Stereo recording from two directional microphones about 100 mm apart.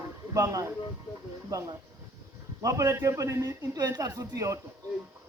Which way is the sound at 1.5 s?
35° right (ahead or behind).